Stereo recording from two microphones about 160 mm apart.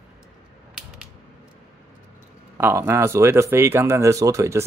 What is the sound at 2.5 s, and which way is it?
Speech, 15° right (ahead or behind).